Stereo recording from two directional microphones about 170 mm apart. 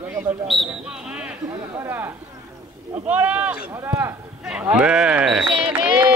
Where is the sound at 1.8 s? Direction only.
15° right (ahead or behind).